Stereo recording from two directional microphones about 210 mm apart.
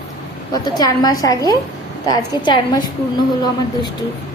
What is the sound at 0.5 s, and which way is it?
A woman's voice, 20° left (ahead or behind).